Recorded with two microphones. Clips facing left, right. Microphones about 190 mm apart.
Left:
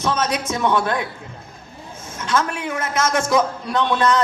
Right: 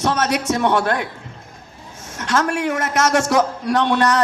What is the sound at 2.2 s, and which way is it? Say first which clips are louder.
A man's voice: right 3 dB; 75° right (ahead or behind).